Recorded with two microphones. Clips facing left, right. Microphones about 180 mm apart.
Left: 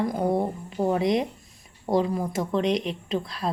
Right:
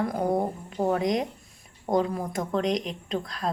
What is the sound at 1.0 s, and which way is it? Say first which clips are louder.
Speech: left 2 dB; 45° right (ahead or behind).